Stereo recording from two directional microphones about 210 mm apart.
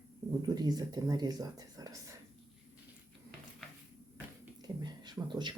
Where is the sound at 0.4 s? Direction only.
20° right (ahead or behind).